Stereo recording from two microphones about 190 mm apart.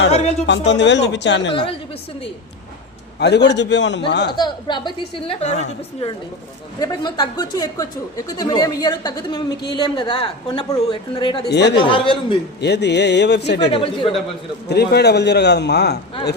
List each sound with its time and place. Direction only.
0.4 s speech: 65° left (ahead or behind)
3.2 s a man's voice: 65° left (ahead or behind)
4.4 s speech: 25° left (ahead or behind)
6.7 s speech: 20° left (ahead or behind)
11.4 s a man's voice: 65° left (ahead or behind)
11.8 s speech: 25° left (ahead or behind)
12.5 s a man's voice: 65° left (ahead or behind)
13.7 s speech: 30° left (ahead or behind)
14.7 s a man's voice: 60° left (ahead or behind)